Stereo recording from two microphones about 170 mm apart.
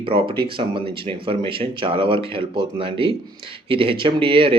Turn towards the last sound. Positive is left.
turn(degrees=-30)  # may be behind; listen again after turning